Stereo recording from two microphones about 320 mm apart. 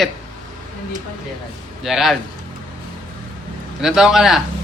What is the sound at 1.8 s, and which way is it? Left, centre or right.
Speech, centre.